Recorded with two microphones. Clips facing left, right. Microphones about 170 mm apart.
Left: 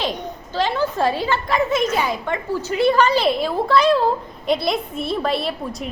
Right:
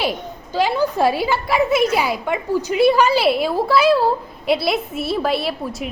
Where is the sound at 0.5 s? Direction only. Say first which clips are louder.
Right 3 dB; 10° right (ahead or behind).